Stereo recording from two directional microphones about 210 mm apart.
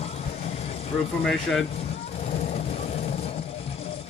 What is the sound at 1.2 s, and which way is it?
Speech, centre (ahead or behind).